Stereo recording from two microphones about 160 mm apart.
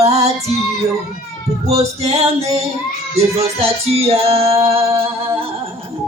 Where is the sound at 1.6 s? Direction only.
40° right (ahead or behind).